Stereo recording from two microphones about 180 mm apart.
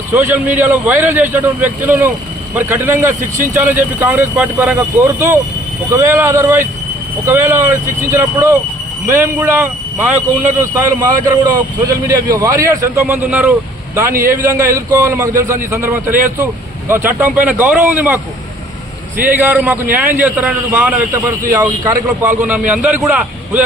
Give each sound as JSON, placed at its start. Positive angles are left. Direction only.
{"t": 0.1, "sound": "a man's voice", "side_deg": -15}
{"t": 3.2, "sound": "speech", "side_deg": -45}
{"t": 3.5, "sound": "a man's voice", "side_deg": -10}
{"t": 11.4, "sound": "a man's voice", "side_deg": -20}
{"t": 19.2, "sound": "a man's voice", "side_deg": -10}